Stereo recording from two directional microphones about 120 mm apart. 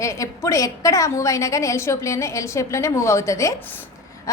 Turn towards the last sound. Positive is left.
turn(degrees=25)  # may be behind; listen again after turning